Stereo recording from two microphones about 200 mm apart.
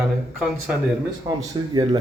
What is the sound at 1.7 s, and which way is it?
Speech, 25° right (ahead or behind).